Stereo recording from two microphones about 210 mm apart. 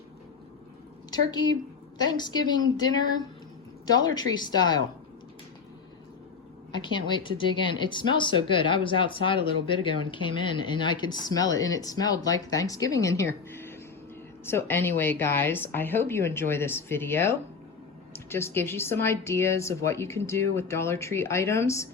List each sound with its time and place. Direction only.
1.1 s speech: 20° left (ahead or behind)
6.7 s speech: 20° left (ahead or behind)